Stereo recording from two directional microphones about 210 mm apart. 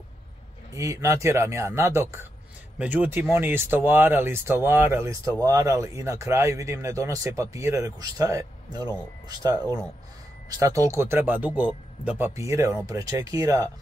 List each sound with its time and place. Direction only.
0.7 s speech: 15° right (ahead or behind)